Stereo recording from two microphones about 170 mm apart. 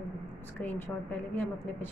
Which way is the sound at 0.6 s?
10° left (ahead or behind).